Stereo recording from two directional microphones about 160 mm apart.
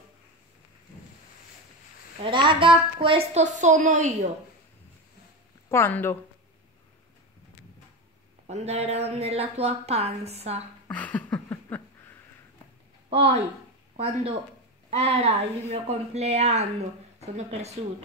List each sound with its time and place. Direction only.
2.2 s a woman's voice: 30° right (ahead or behind); by 4.3 s 50° right (ahead or behind)
5.7 s speech: 15° left (ahead or behind)
8.5 s a woman's voice: 45° right (ahead or behind)
10.9 s a sound: 10° left (ahead or behind)
13.1 s a woman's voice: 35° right (ahead or behind)